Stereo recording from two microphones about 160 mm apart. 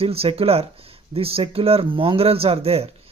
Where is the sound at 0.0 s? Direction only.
35° right (ahead or behind).